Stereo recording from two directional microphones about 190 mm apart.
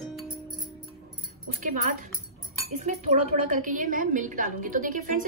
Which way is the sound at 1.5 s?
45° right (ahead or behind).